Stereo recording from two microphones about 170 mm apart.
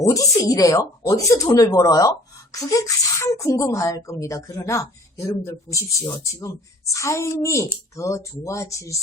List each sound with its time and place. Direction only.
0.1 s a woman's voice: 20° left (ahead or behind)